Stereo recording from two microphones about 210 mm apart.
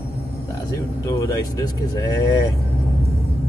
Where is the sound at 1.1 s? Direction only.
15° left (ahead or behind).